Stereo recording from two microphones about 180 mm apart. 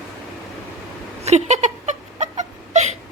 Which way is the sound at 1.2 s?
40° right (ahead or behind).